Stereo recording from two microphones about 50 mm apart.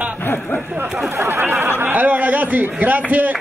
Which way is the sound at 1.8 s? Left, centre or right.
Right.